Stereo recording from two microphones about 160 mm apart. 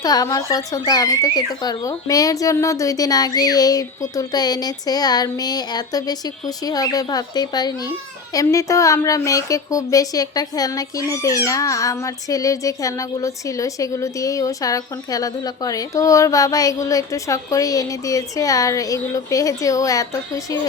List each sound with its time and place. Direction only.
0.0 s speech: 25° left (ahead or behind)